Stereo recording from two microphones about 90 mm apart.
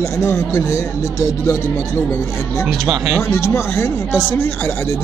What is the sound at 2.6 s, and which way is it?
Speech, centre (ahead or behind).